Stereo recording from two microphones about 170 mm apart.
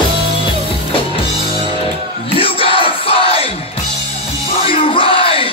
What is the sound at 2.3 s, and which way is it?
Crowd, 30° left (ahead or behind).